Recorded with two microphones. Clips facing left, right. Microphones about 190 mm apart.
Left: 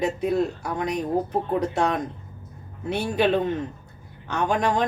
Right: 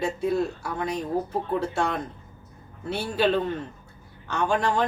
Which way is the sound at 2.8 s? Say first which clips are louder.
Left 2 dB; 20° left (ahead or behind).